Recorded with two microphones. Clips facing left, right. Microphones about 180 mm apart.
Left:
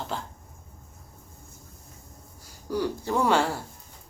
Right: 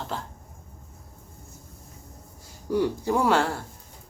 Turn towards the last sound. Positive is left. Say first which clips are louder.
# right 1 dB
turn(degrees=0)  # may be behind; listen again after turning